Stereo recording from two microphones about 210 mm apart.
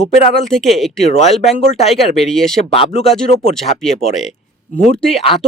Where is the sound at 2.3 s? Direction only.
Centre (ahead or behind).